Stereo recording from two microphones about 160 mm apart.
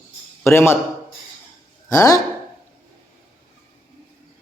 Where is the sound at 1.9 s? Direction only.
20° left (ahead or behind).